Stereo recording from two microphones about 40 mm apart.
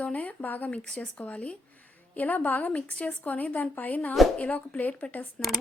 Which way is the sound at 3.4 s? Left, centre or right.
Left.